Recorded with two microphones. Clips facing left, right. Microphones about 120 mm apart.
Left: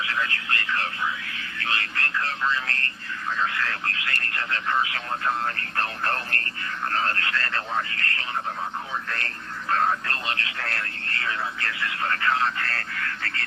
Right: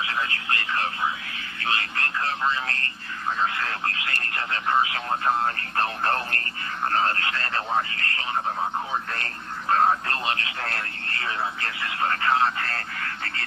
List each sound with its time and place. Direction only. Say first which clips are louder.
0.0 s a sound: even; 25° right (ahead or behind)
3.3 s speech: even; 25° right (ahead or behind)
9.1 s speech: right 1 dB; 25° right (ahead or behind)